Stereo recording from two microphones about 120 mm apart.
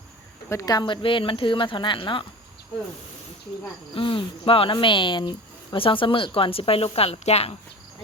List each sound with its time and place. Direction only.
0.5 s a woman's voice: 30° left (ahead or behind)
3.9 s a woman's voice: 45° left (ahead or behind)